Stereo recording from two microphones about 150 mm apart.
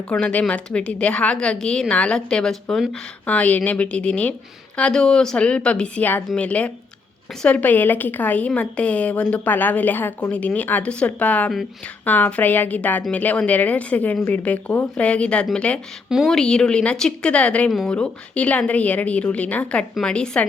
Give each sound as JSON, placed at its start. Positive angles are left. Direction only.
{"t": 0.1, "sound": "speech", "side_deg": 10}